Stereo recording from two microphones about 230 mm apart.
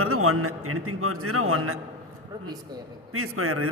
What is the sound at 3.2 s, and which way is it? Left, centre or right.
Speech, right.